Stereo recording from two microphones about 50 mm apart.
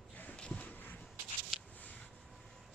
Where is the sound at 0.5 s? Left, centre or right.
Left.